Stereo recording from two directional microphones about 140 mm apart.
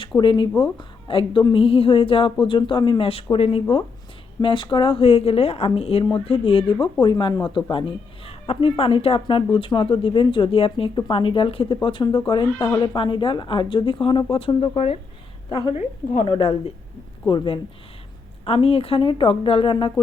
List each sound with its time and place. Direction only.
0.2 s speech: 35° left (ahead or behind)
4.4 s a woman's voice: 35° left (ahead or behind)